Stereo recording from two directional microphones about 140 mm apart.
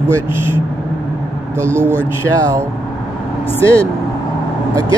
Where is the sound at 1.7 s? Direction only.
20° right (ahead or behind).